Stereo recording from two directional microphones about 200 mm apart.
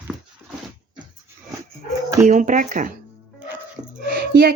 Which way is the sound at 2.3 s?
40° right (ahead or behind).